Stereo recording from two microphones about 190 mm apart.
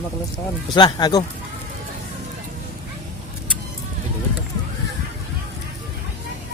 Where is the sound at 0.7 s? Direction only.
25° left (ahead or behind).